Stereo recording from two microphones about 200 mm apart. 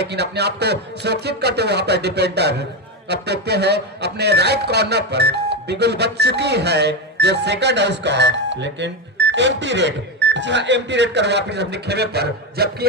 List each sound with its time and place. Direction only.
0.0 s speech: 55° right (ahead or behind)